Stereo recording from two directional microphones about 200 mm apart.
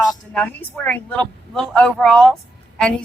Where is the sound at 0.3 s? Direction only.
5° left (ahead or behind).